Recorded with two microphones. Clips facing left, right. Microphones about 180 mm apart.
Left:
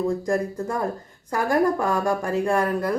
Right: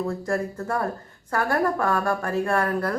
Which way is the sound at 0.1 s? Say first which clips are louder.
Left 3 dB; 20° left (ahead or behind).